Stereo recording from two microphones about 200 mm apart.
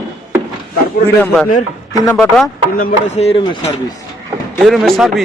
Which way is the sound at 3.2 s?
30° left (ahead or behind).